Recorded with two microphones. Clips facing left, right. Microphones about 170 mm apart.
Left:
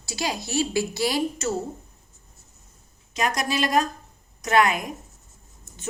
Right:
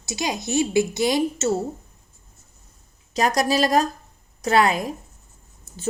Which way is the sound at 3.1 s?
35° right (ahead or behind).